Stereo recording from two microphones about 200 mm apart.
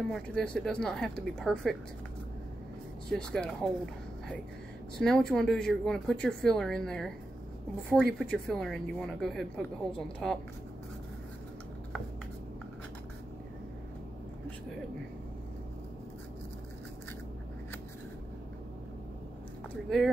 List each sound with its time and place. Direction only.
0.1 s a woman's voice: 5° left (ahead or behind)
3.1 s a woman's voice: 5° left (ahead or behind)
4.9 s a woman's voice: 5° left (ahead or behind)